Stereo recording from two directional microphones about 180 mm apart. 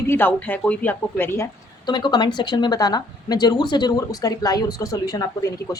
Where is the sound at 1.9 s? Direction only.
25° left (ahead or behind).